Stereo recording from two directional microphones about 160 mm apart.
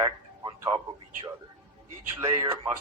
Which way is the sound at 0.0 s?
25° right (ahead or behind).